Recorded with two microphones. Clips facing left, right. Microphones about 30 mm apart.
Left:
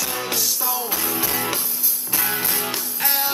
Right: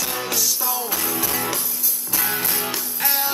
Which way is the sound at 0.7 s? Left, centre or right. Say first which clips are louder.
Even; centre.